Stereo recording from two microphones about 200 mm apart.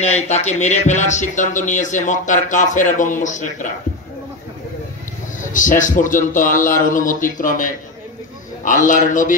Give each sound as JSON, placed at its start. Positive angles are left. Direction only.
{"t": 0.0, "sound": "speech", "side_deg": 35}
{"t": 5.4, "sound": "speech", "side_deg": 40}